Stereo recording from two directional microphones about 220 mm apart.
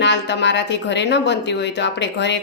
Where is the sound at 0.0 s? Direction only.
55° left (ahead or behind).